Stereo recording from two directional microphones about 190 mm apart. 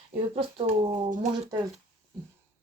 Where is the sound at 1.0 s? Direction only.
40° right (ahead or behind).